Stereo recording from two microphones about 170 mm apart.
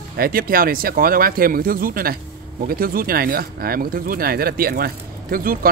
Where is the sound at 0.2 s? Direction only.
60° right (ahead or behind).